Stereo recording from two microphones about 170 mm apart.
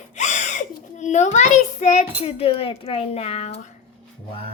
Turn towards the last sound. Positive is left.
turn(degrees=40)  # may be behind; listen again after turning